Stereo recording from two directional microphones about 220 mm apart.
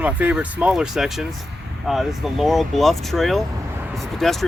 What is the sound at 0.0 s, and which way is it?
Speech, 5° right (ahead or behind).